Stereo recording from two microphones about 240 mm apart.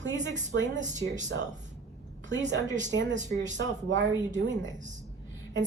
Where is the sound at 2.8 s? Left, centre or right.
Right.